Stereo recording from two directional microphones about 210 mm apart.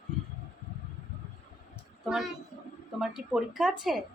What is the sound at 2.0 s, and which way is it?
A woman's voice, centre (ahead or behind).